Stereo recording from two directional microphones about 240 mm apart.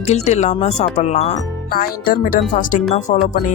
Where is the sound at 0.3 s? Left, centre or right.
Left.